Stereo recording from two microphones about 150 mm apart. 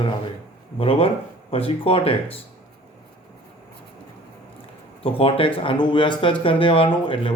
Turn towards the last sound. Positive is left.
turn(degrees=35)  # may be behind; listen again after turning